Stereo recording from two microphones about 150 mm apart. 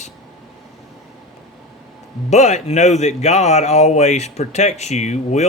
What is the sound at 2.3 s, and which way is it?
Speech, 50° left (ahead or behind).